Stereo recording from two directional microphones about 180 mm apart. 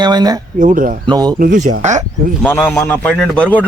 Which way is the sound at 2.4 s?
10° left (ahead or behind).